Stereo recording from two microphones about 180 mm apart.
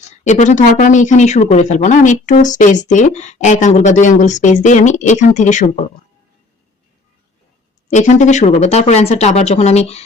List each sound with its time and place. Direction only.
0.3 s speech: 40° left (ahead or behind)
7.9 s speech: 40° left (ahead or behind)